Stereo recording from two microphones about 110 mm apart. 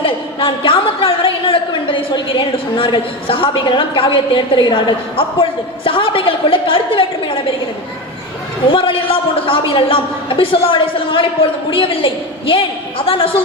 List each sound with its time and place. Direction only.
0.0 s a woman's voice: 50° left (ahead or behind)
8.7 s a woman's voice: 55° left (ahead or behind)